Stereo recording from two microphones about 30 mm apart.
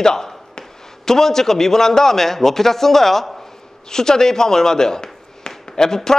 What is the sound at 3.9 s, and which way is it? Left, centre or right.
A man's voice, centre.